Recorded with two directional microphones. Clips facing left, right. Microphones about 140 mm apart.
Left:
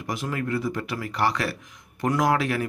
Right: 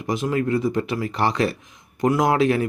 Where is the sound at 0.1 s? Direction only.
20° right (ahead or behind).